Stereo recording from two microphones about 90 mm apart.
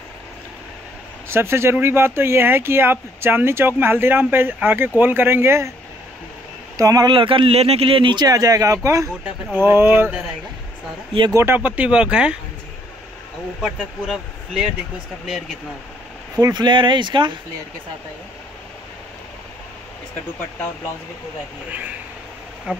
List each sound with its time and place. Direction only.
1.3 s speech: 30° right (ahead or behind)
6.8 s speech: 45° right (ahead or behind)
7.1 s speech: 75° right (ahead or behind)
8.3 s speech: 40° right (ahead or behind)
9.6 s speech: 25° right (ahead or behind)
11.5 s speech: 15° right (ahead or behind)
13.6 s speech: 10° right (ahead or behind)
16.3 s speech: 40° right (ahead or behind)
16.6 s speech: 60° right (ahead or behind)
22.7 s speech: 10° right (ahead or behind)